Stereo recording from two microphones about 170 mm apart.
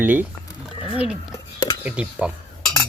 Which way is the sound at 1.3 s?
20° left (ahead or behind).